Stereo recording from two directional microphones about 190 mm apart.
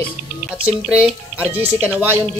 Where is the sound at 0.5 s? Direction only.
5° right (ahead or behind).